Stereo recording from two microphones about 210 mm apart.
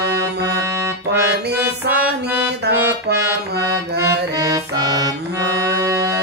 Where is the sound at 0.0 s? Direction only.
15° right (ahead or behind).